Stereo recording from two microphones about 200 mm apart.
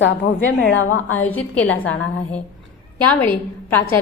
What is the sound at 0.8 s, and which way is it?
Speech, 90° left.